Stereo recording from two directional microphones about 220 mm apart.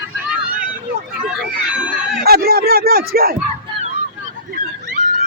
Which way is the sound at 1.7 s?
5° right (ahead or behind).